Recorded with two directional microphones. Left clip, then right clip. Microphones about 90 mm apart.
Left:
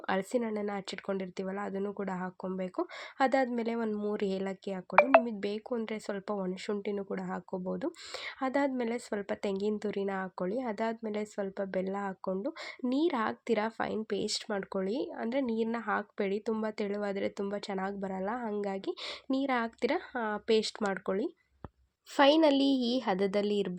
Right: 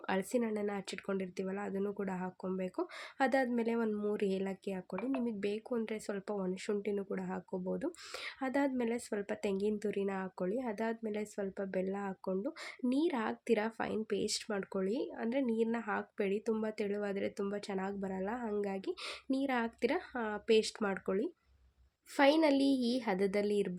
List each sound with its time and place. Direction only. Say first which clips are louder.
0.1 s speech: left 3 dB; 15° left (ahead or behind)